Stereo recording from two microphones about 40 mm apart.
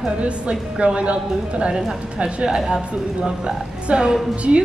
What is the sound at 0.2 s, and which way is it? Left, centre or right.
A woman's voice, right.